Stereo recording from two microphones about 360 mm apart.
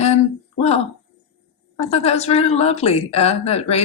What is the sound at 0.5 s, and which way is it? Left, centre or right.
Speech, centre.